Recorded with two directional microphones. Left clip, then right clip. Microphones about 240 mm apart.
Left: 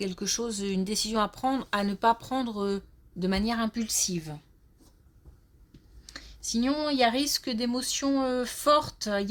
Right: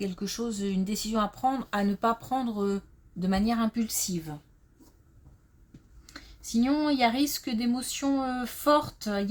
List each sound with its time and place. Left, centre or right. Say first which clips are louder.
0.0 s speech: left 3 dB; left
6.1 s speech: left 4 dB; left